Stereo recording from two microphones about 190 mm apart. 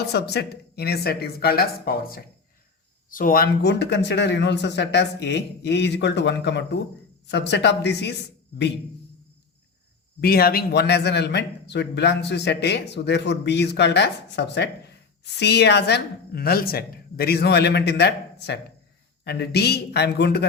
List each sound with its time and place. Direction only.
0.0 s a man's voice: 60° left (ahead or behind)
10.2 s a man's voice: 55° left (ahead or behind)